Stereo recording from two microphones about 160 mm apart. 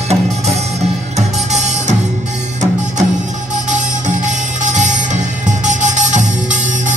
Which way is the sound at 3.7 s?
50° right (ahead or behind).